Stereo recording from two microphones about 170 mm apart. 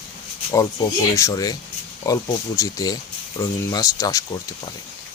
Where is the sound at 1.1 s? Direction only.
20° left (ahead or behind).